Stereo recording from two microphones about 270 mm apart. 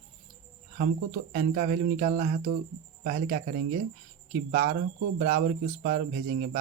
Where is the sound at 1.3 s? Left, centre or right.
Right.